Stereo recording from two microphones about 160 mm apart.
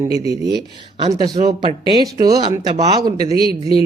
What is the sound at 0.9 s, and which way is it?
Speech, 25° right (ahead or behind).